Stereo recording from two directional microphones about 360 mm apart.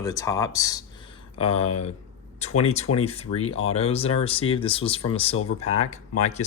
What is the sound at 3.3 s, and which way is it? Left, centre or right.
Speech, left.